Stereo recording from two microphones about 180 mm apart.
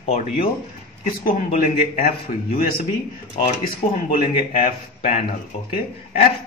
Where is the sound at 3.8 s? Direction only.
40° left (ahead or behind).